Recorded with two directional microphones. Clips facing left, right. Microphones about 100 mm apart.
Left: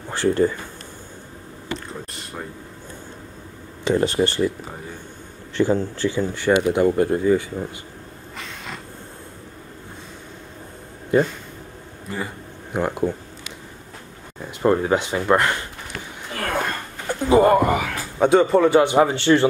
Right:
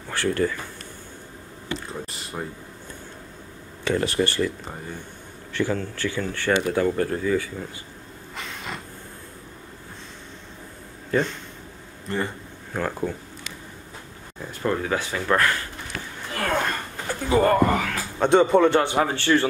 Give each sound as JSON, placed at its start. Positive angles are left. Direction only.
{"t": 0.1, "sound": "speech", "side_deg": 25}
{"t": 2.0, "sound": "a sound", "side_deg": 0}
{"t": 3.8, "sound": "speech", "side_deg": 25}
{"t": 5.5, "sound": "speech", "side_deg": 25}
{"t": 8.4, "sound": "a sound", "side_deg": 0}
{"t": 11.1, "sound": "a man's voice", "side_deg": 10}
{"t": 12.7, "sound": "speech", "side_deg": 15}
{"t": 14.6, "sound": "speech", "side_deg": 30}
{"t": 17.1, "sound": "a man's voice", "side_deg": 20}
{"t": 18.8, "sound": "speech", "side_deg": 15}